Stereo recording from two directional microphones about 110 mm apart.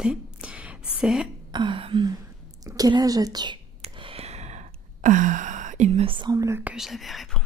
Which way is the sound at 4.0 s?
60° right (ahead or behind).